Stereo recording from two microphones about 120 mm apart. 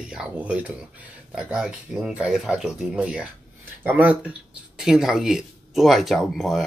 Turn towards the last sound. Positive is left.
turn(degrees=0)  # may be behind; listen again after turning